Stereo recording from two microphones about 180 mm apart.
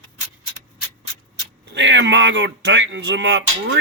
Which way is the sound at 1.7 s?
85° right.